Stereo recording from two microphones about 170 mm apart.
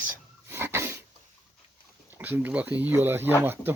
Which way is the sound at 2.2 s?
10° right (ahead or behind).